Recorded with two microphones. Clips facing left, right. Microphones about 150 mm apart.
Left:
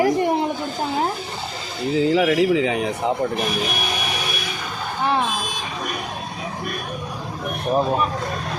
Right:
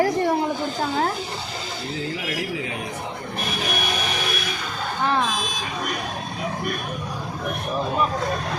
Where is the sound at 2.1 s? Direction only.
90° left.